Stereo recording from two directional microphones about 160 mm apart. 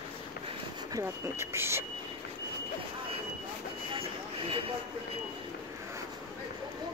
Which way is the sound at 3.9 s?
35° right (ahead or behind).